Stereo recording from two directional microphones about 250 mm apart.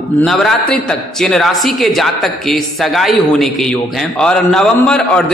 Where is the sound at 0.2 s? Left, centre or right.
Centre.